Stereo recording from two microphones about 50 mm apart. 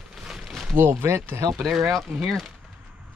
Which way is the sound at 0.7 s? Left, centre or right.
Right.